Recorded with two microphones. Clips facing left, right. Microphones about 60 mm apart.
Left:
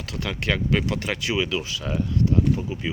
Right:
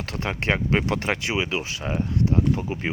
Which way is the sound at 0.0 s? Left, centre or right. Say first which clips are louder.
Right 2 dB; right.